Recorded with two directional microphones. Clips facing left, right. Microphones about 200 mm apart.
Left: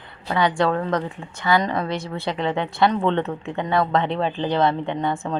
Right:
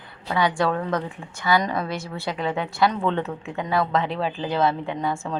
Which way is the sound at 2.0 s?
20° left (ahead or behind).